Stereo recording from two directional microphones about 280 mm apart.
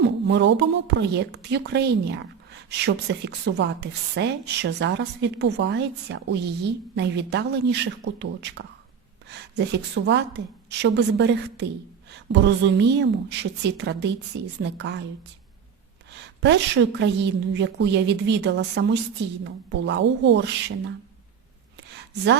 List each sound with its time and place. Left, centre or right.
0.0 s speech: right
16.4 s speech: right
22.1 s speech: right